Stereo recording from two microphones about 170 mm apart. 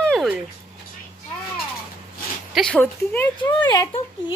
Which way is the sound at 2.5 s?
5° left (ahead or behind).